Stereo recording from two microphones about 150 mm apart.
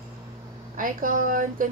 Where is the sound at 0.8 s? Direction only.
65° right (ahead or behind).